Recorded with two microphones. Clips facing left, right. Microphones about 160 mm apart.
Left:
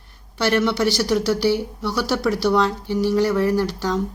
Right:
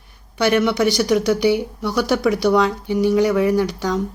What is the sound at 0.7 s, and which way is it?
Speech, 15° right (ahead or behind).